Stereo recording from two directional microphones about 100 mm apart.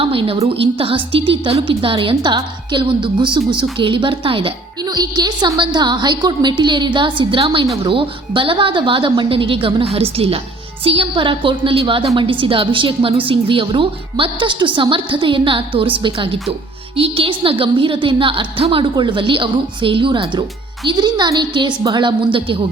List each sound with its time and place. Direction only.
0.0 s a woman's voice: 65° right (ahead or behind)
4.9 s a woman's voice: 45° right (ahead or behind)